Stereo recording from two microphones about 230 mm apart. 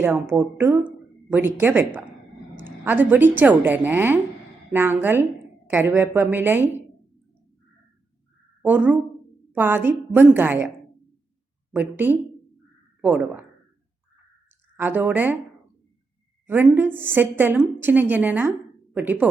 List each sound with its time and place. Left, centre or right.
0.0 s speech: centre
8.6 s speech: centre
11.7 s speech: centre
14.8 s speech: centre
16.5 s speech: centre